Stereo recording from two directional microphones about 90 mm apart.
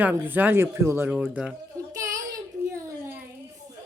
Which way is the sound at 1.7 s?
35° right (ahead or behind).